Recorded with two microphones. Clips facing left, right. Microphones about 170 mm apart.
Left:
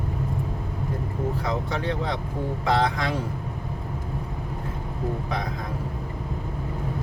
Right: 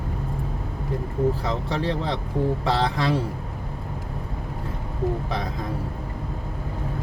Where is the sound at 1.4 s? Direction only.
30° right (ahead or behind).